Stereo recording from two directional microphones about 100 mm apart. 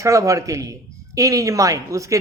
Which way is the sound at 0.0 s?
30° right (ahead or behind).